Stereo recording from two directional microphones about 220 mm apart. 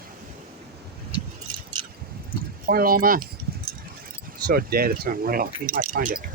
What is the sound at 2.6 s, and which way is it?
Speech, 40° right (ahead or behind).